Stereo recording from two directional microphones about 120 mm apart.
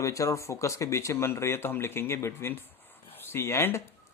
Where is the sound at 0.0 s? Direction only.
25° left (ahead or behind).